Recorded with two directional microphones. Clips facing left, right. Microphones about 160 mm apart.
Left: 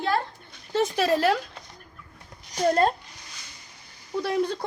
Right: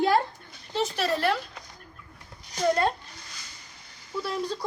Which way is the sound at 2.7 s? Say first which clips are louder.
Left 3 dB; 40° left (ahead or behind).